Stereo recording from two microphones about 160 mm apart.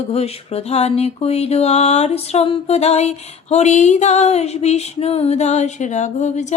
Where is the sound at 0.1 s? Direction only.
40° left (ahead or behind).